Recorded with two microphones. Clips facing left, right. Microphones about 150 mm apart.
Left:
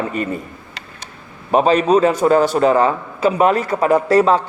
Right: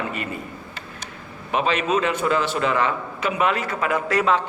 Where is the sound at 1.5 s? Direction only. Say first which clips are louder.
Left 8 dB; 40° left (ahead or behind).